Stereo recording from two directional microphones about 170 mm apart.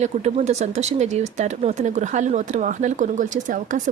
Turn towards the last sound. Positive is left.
turn(degrees=-50)  # may be behind; listen again after turning